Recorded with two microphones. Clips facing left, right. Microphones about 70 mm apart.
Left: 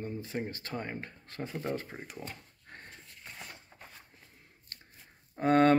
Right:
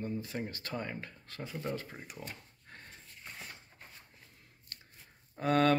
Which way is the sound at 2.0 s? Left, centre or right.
Left.